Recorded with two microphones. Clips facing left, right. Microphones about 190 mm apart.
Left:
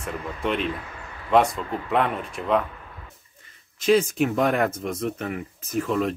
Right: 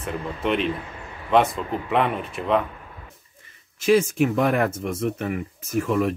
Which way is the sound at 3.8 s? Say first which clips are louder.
Right 1 dB; 5° right (ahead or behind).